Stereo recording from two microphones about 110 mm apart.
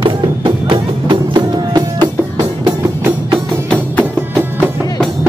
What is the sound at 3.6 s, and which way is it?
Music, 10° left (ahead or behind).